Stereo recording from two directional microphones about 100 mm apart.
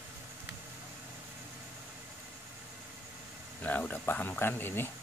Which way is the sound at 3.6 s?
15° left (ahead or behind).